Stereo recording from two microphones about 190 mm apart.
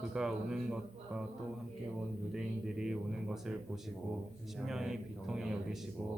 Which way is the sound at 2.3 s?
5° right (ahead or behind).